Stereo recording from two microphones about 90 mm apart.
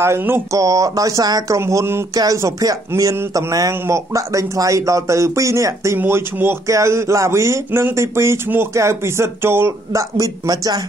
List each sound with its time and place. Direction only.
0.0 s speech: 25° right (ahead or behind)
0.5 s speech: 40° right (ahead or behind)
1.6 s speech: 30° right (ahead or behind)
5.9 s speech: 25° right (ahead or behind); by 10.8 s 45° right (ahead or behind)